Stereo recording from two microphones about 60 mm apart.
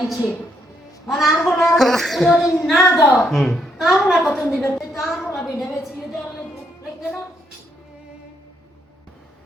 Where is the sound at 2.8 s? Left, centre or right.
Left.